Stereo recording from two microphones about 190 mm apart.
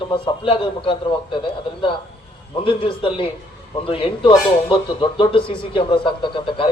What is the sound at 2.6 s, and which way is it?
Speech, 25° left (ahead or behind).